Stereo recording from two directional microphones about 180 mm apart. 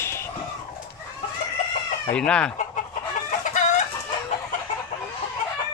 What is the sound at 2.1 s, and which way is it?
Speech, 5° left (ahead or behind).